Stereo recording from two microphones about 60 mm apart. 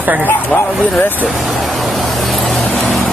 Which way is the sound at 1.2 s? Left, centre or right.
Centre.